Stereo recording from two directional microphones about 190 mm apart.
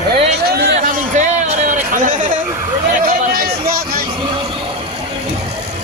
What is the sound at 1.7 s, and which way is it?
Chatter, 45° right (ahead or behind).